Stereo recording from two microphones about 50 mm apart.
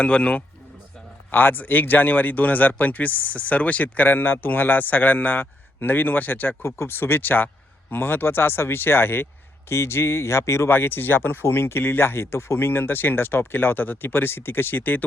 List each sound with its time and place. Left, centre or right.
0.0 s a man's voice: left
1.3 s speech: left
6.6 s speech: left
9.6 s speech: left
10.7 s speech: left
11.4 s speech: left
12.5 s speech: left